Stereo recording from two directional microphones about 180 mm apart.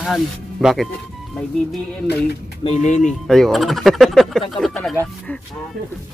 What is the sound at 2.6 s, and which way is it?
Speech, 40° left (ahead or behind).